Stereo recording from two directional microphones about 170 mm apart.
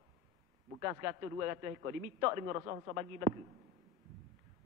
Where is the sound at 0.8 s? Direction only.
20° right (ahead or behind).